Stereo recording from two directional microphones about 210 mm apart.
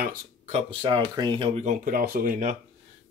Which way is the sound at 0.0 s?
45° right (ahead or behind).